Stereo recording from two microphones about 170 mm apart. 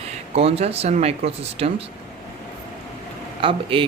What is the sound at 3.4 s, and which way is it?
Speech, 30° right (ahead or behind).